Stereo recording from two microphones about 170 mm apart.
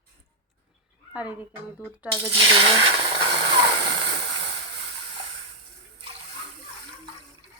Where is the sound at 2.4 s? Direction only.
30° right (ahead or behind).